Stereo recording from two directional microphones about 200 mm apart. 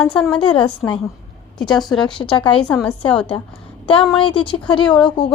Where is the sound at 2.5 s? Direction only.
5° left (ahead or behind).